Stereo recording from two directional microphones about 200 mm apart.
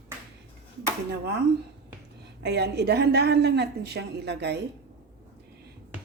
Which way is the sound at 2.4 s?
60° right (ahead or behind).